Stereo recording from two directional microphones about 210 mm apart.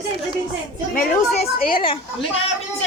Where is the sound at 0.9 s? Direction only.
45° left (ahead or behind).